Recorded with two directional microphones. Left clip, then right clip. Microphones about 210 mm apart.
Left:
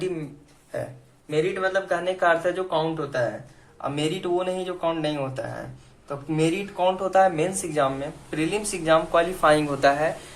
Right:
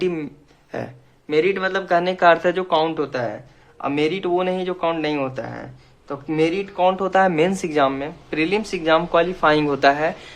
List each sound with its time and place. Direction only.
0.7 s speech: 40° right (ahead or behind); by 10.1 s 25° right (ahead or behind)